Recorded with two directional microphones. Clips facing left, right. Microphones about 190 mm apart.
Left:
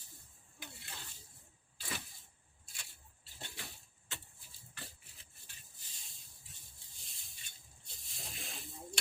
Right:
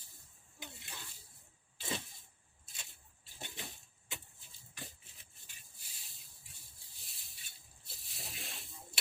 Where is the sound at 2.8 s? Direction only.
15° right (ahead or behind).